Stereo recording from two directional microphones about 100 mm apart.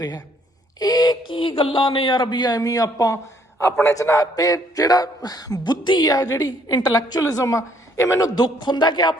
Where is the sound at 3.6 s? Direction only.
25° left (ahead or behind).